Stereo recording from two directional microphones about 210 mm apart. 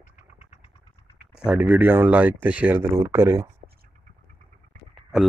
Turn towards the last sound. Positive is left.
turn(degrees=0)  # may be behind; listen again after turning